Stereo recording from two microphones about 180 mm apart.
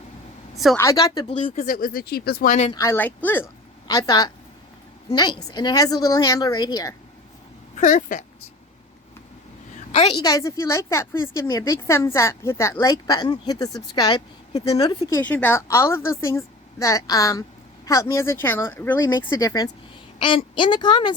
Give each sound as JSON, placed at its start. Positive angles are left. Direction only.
{"t": 0.5, "sound": "a woman's voice", "side_deg": 0}
{"t": 0.8, "sound": "a woman's voice", "side_deg": 20}
{"t": 1.3, "sound": "speech", "side_deg": 35}
{"t": 1.6, "sound": "speech", "side_deg": 50}
{"t": 2.7, "sound": "a woman's voice", "side_deg": 15}
{"t": 3.8, "sound": "a woman's voice", "side_deg": 20}
{"t": 7.8, "sound": "speech", "side_deg": 45}
{"t": 9.9, "sound": "a woman's voice", "side_deg": 35}
{"t": 10.2, "sound": "a woman's voice", "side_deg": 20}
{"t": 15.2, "sound": "a woman's voice", "side_deg": 10}